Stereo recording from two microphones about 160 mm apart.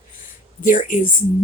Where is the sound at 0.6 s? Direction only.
55° left (ahead or behind).